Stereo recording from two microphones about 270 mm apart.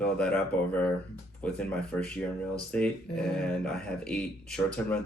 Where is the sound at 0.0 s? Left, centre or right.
Centre.